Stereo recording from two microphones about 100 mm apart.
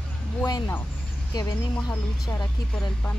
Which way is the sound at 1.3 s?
40° left (ahead or behind).